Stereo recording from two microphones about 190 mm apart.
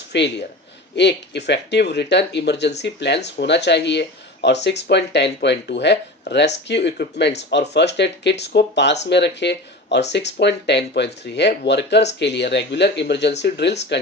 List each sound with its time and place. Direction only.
0.1 s speech: 65° left (ahead or behind)